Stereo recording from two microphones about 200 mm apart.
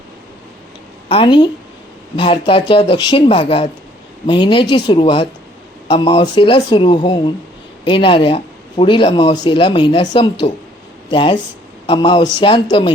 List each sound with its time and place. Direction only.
1.0 s a woman's voice: 25° left (ahead or behind)